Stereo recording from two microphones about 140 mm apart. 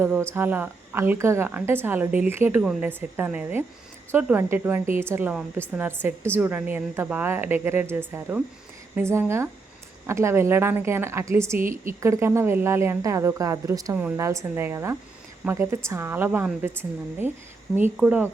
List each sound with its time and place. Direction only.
0.0 s a woman's voice: 15° right (ahead or behind)
17.7 s a woman's voice: 10° right (ahead or behind)